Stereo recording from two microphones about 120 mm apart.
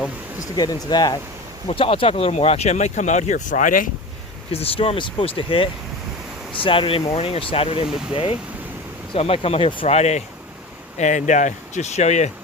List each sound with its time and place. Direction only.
0.5 s speech: 35° left (ahead or behind)
1.6 s speech: 50° left (ahead or behind); by 3.8 s 90° left
4.5 s speech: 55° left (ahead or behind)
6.7 s speech: 50° left (ahead or behind); by 10.2 s 65° left (ahead or behind)
10.9 s speech: 85° left